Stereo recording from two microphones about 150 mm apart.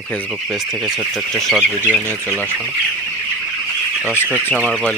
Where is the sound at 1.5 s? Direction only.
5° right (ahead or behind).